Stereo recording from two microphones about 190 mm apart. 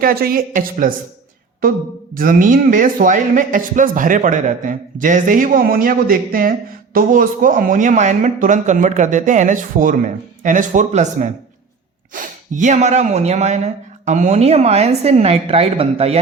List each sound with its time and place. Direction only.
0.0 s speech: 50° right (ahead or behind)
2.1 s a man's voice: 45° right (ahead or behind)